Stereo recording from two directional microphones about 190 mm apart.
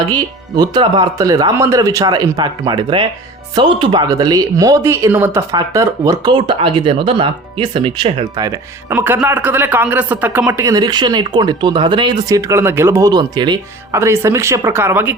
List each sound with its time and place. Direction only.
0.1 s speech: 20° right (ahead or behind)
8.9 s speech: 10° right (ahead or behind)